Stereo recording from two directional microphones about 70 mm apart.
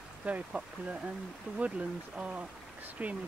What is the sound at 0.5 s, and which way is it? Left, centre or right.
Speech, centre.